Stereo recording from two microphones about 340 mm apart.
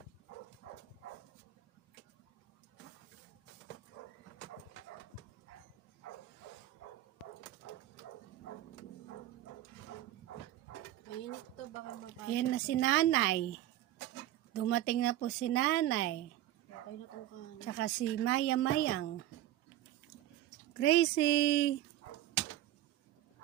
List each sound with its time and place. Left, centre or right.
12.3 s speech: left
14.6 s speech: left
17.7 s speech: left
20.7 s speech: left